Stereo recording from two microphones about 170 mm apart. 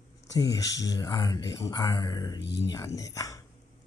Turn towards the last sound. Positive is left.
turn(degrees=20)  # may be behind; listen again after turning